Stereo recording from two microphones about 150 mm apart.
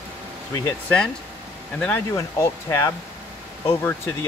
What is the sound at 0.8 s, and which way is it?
Speech, 5° left (ahead or behind).